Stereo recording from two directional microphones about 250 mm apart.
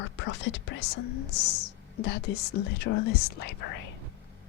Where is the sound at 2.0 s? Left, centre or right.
Left.